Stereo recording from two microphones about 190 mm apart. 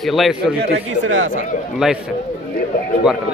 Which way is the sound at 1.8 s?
Centre (ahead or behind).